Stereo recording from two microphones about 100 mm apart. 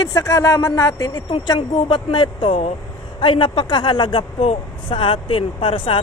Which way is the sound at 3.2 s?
55° left (ahead or behind).